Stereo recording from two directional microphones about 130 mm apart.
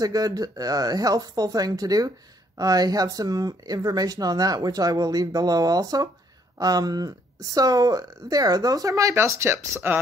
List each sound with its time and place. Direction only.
0.0 s speech: 30° right (ahead or behind)